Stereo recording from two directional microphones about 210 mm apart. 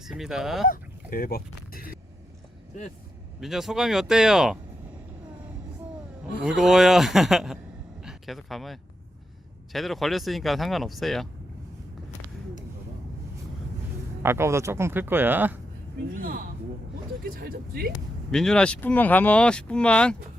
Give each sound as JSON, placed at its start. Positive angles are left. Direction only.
{"t": 0.0, "sound": "speech", "side_deg": 0}
{"t": 0.7, "sound": "honk", "side_deg": 45}
{"t": 3.4, "sound": "speech", "side_deg": 0}
{"t": 6.4, "sound": "speech", "side_deg": -5}
{"t": 14.2, "sound": "speech", "side_deg": -10}
{"t": 17.2, "sound": "speech", "side_deg": -45}
{"t": 18.3, "sound": "speech", "side_deg": 5}